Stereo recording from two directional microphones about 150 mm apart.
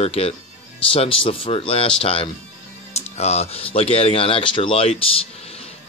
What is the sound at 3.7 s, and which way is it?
Speech, 40° left (ahead or behind).